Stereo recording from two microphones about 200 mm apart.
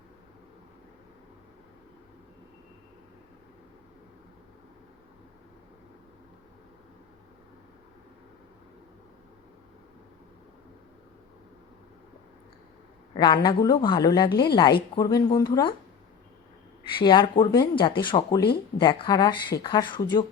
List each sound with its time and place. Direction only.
13.1 s a woman's voice: 20° left (ahead or behind)
16.8 s a woman's voice: 25° left (ahead or behind)